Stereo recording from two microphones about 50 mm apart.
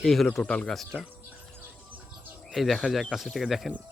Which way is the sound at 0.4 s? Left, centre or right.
Centre.